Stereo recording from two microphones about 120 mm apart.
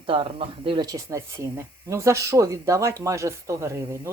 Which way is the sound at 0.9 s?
25° right (ahead or behind).